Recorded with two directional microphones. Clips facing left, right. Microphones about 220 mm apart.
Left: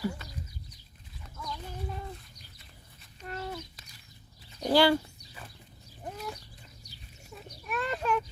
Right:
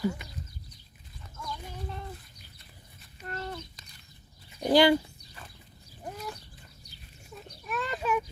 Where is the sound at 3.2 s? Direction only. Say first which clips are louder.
Even; 5° left (ahead or behind).